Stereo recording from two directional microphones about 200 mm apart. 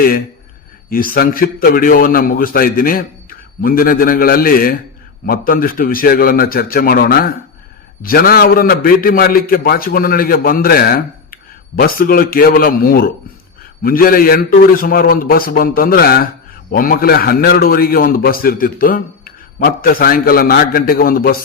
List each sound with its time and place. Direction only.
0.9 s a man's voice: 45° left (ahead or behind)